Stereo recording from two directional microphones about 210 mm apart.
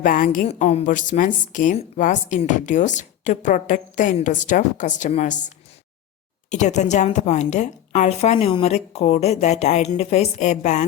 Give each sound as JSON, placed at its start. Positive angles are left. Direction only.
{"t": 0.0, "sound": "speech", "side_deg": 40}
{"t": 0.4, "sound": "speech", "side_deg": 30}